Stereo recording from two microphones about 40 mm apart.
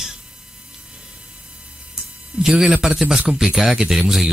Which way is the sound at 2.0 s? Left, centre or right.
Centre.